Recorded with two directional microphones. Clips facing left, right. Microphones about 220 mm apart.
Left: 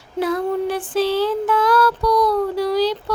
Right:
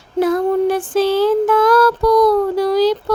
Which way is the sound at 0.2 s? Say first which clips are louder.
Right 5 dB; 45° right (ahead or behind).